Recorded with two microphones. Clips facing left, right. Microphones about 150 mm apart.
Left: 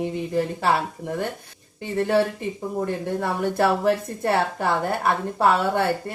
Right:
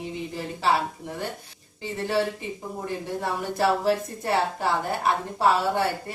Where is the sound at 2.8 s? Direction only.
55° left (ahead or behind).